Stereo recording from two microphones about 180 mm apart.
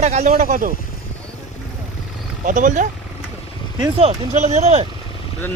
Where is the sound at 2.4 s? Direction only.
45° right (ahead or behind).